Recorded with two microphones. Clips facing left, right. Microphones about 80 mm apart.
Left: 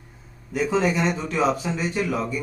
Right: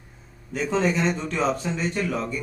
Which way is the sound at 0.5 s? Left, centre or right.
Centre.